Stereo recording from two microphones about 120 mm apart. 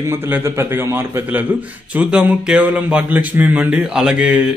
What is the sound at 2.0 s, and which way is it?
Speech, 10° right (ahead or behind).